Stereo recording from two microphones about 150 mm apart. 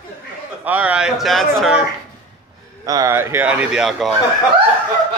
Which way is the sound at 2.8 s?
20° right (ahead or behind).